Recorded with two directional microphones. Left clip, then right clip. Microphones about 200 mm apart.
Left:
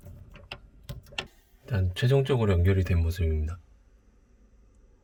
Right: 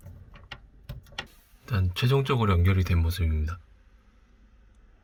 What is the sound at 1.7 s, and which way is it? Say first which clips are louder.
Speech: left 1 dB; centre (ahead or behind).